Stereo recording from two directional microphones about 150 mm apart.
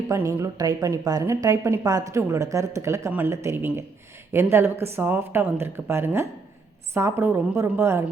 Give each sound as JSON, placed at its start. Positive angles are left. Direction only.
{"t": 0.1, "sound": "a woman's voice", "side_deg": -20}